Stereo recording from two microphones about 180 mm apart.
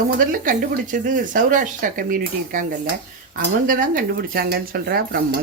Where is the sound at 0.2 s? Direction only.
50° right (ahead or behind).